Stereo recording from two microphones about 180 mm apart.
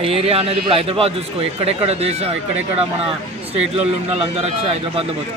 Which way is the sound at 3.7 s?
35° right (ahead or behind).